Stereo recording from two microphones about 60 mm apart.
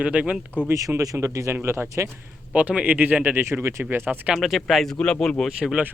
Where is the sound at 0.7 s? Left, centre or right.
Right.